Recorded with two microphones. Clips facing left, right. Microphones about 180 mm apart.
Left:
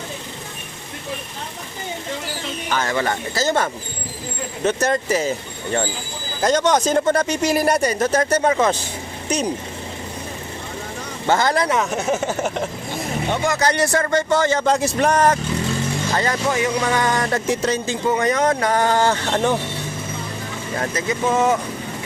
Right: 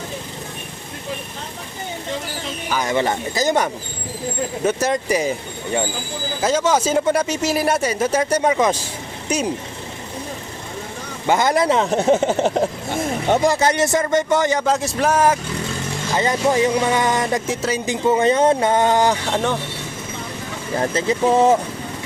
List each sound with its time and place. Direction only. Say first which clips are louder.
2.6 s speech: even; 10° right (ahead or behind)
2.9 s speech: right 2 dB; 20° right (ahead or behind)
6.4 s speech: left 1 dB; 5° right (ahead or behind)
11.3 s speech: right 2 dB; 20° right (ahead or behind)
12.5 s speech: right 5 dB; 40° right (ahead or behind)
13.6 s speech: right 1 dB; 20° right (ahead or behind)
14.6 s a man's voice: left 1 dB; centre (ahead or behind)
16.1 s speech: right 3 dB; 20° right (ahead or behind)
16.5 s speech: right 4 dB; 30° right (ahead or behind)
17.4 s a man's voice: left 2 dB; centre (ahead or behind)
17.8 s speech: right 7 dB; 20° right (ahead or behind)
20.7 s speech: right 4 dB; 30° right (ahead or behind)